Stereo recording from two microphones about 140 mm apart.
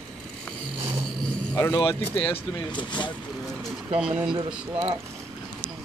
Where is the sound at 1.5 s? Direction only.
20° left (ahead or behind).